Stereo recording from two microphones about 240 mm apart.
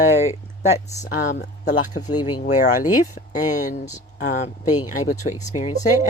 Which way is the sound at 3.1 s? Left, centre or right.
Left.